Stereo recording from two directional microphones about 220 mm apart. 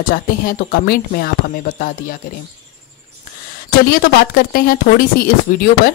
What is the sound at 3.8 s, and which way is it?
Speech, 40° left (ahead or behind).